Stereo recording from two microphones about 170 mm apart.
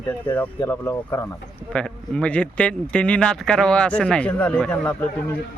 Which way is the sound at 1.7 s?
5° left (ahead or behind).